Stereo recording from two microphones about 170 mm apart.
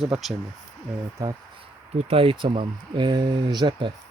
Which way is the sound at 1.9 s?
35° right (ahead or behind).